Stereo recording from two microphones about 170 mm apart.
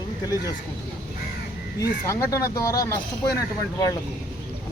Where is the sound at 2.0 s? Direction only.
15° left (ahead or behind).